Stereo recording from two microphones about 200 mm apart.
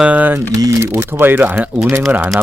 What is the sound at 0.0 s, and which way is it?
Speech, 10° right (ahead or behind).